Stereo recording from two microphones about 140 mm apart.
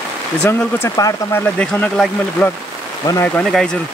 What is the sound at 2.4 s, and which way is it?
Speech, 15° left (ahead or behind).